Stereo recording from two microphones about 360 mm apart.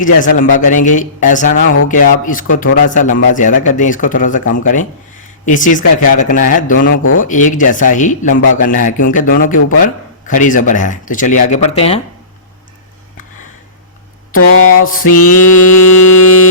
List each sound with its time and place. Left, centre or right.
0.0 s speech: left
14.3 s a sound: left
15.0 s mantra: left